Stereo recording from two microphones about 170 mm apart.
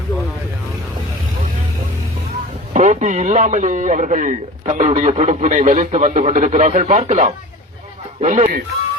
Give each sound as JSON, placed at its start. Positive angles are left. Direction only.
{"t": 2.7, "sound": "speech", "side_deg": -45}